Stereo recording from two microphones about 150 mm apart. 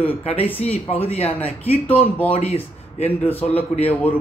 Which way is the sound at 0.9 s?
40° left (ahead or behind).